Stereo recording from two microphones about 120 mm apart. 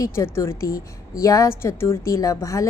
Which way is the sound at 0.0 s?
20° left (ahead or behind).